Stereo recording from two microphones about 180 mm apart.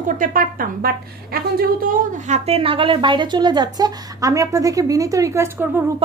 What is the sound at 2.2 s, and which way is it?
Speech, 35° right (ahead or behind).